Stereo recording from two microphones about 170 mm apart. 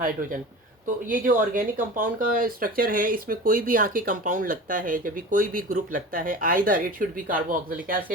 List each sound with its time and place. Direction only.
0.0 s speech: 55° right (ahead or behind)